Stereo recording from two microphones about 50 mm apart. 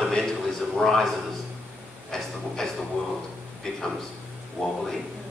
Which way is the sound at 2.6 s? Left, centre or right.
Centre.